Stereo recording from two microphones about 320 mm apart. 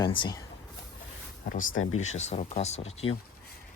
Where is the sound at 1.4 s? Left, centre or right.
Left.